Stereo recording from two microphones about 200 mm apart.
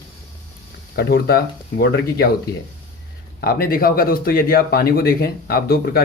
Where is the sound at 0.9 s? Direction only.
50° left (ahead or behind).